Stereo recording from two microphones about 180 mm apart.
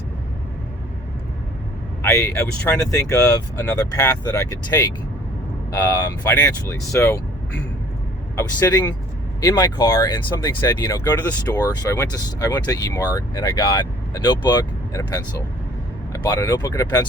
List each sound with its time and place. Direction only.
2.0 s speech: 15° left (ahead or behind)